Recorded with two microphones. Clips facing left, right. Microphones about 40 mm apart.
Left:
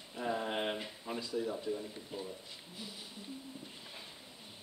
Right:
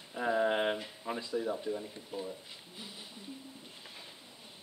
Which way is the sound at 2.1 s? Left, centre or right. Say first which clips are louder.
Right 4 dB; centre.